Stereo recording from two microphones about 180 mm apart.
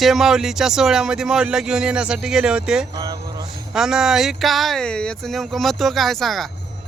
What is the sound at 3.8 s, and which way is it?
Speech, centre (ahead or behind).